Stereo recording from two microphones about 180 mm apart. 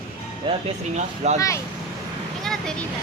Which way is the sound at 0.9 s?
40° right (ahead or behind).